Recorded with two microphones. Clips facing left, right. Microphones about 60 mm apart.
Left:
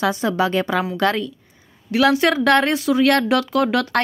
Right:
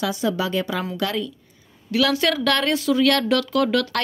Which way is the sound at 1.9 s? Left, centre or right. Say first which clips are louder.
Left 4 dB; left.